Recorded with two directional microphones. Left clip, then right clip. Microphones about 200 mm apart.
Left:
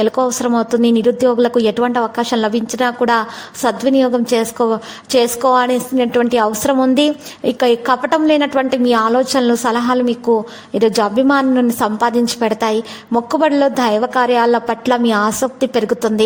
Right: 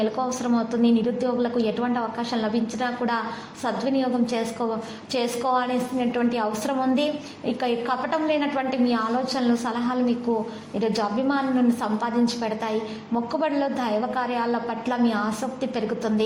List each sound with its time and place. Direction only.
0.0 s a woman's voice: 50° left (ahead or behind)